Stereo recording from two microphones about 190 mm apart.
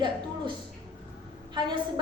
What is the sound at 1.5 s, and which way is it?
Speech, 25° right (ahead or behind).